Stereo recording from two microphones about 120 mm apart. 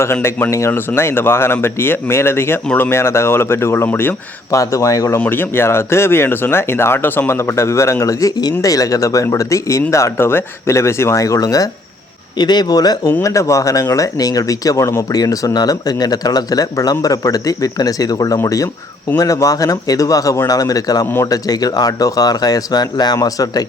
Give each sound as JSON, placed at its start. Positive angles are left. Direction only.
{"t": 0.0, "sound": "speech", "side_deg": 20}